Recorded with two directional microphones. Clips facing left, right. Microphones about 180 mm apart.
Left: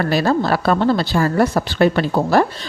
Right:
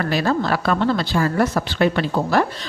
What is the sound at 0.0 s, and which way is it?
A woman's voice, 40° left (ahead or behind).